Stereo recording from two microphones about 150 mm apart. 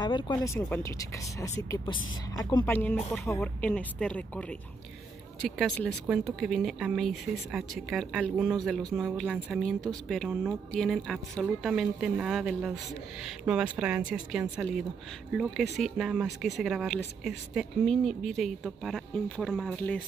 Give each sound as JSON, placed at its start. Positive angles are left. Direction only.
{"t": 0.0, "sound": "speech", "side_deg": 25}
{"t": 2.6, "sound": "speech", "side_deg": 10}